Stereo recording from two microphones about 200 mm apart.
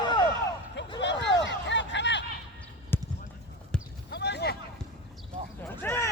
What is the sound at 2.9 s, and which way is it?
Basketball bounce, 10° left (ahead or behind).